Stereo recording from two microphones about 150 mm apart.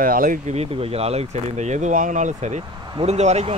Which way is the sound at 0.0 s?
70° right (ahead or behind).